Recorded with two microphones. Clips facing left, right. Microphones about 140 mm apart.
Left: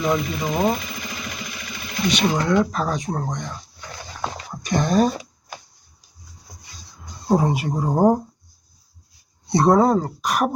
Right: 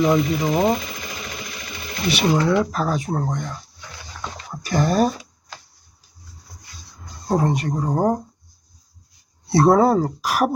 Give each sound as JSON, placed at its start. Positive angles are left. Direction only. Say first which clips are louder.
{"t": 0.0, "sound": "speech", "louder": "right 4 dB", "side_deg": -5}
{"t": 2.0, "sound": "speech", "louder": "right 2 dB", "side_deg": -5}
{"t": 4.5, "sound": "speech", "louder": "even", "side_deg": -5}
{"t": 5.5, "sound": "a sound", "louder": "left 3 dB", "side_deg": 15}
{"t": 7.3, "sound": "speech", "louder": "left 1 dB", "side_deg": 5}
{"t": 9.5, "sound": "speech", "louder": "right 1 dB", "side_deg": -5}